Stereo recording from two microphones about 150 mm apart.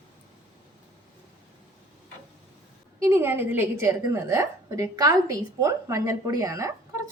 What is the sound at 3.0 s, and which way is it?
A woman's voice, 15° right (ahead or behind).